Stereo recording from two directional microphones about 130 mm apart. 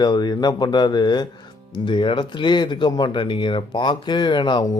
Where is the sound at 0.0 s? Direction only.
30° left (ahead or behind).